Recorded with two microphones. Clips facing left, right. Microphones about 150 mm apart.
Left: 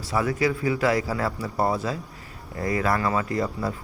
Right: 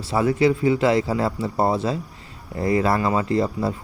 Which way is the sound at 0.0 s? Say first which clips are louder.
Right 5 dB; 25° right (ahead or behind).